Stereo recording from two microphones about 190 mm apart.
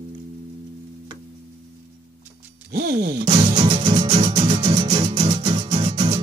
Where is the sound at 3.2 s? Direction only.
30° right (ahead or behind).